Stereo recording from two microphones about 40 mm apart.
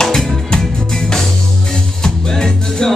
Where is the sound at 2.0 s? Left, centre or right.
Centre.